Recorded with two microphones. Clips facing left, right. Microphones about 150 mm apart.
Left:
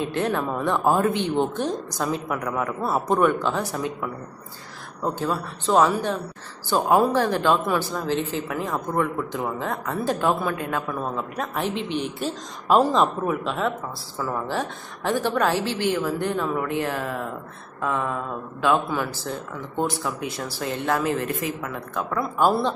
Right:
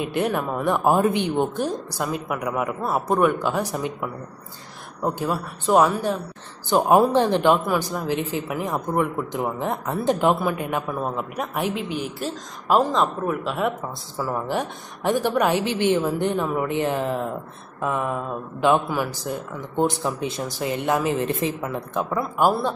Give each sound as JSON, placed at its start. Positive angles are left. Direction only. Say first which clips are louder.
{"t": 0.0, "sound": "speech", "louder": "right 1 dB", "side_deg": -15}